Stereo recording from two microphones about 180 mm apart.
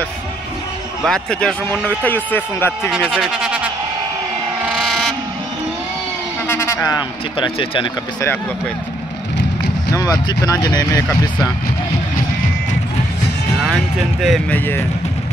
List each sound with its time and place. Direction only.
1.0 s speech: 5° left (ahead or behind)
2.9 s speech: 5° right (ahead or behind)
6.4 s speech: 15° left (ahead or behind)
9.9 s speech: 20° left (ahead or behind)
14.2 s speech: centre (ahead or behind)